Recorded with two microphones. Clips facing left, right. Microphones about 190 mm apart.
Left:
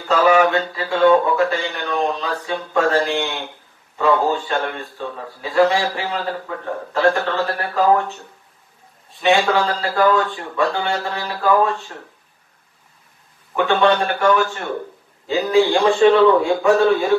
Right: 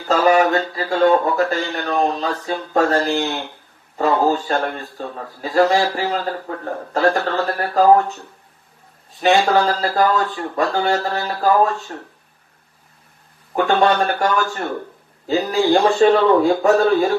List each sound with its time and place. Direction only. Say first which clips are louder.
0.1 s a man's voice: even; 40° right (ahead or behind)
4.0 s a man's voice: right 1 dB; 40° right (ahead or behind)
9.2 s a man's voice: right 1 dB; 40° right (ahead or behind)
13.6 s a man's voice: even; 40° right (ahead or behind)